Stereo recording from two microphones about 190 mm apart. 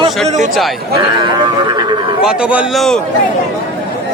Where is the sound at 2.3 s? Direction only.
5° right (ahead or behind).